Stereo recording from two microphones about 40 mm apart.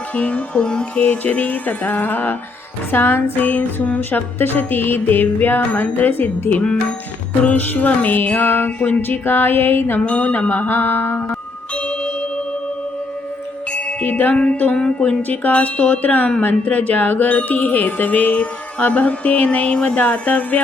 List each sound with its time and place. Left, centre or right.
0.1 s music: left
1.0 s music: left
2.9 s music: left
9.0 s music: left
10.0 s music: left
10.7 s music: left
11.7 s a sound: left
13.7 s music: left
14.1 s music: left
14.8 s music: left
15.3 s music: left
20.0 s music: left